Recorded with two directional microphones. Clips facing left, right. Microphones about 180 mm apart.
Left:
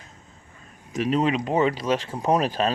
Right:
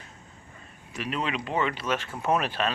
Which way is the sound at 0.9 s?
40° left (ahead or behind).